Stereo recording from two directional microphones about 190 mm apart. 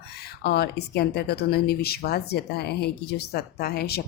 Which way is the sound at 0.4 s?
60° left (ahead or behind).